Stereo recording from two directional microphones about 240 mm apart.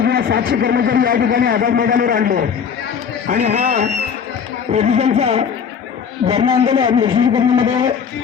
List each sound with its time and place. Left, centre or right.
0.0 s a man's voice: right; by 7.9 s centre